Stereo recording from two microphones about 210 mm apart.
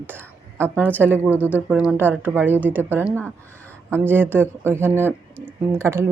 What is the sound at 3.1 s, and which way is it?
Speech, 10° left (ahead or behind).